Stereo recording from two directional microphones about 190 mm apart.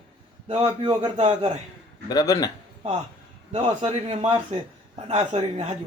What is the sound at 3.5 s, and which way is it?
A man's voice, 30° right (ahead or behind).